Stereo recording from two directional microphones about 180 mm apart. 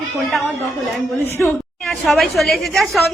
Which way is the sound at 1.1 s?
15° left (ahead or behind).